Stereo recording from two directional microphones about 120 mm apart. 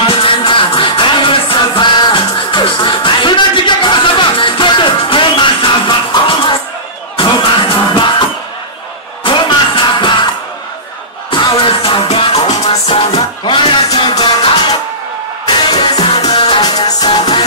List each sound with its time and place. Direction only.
0.2 s music: 45° left (ahead or behind)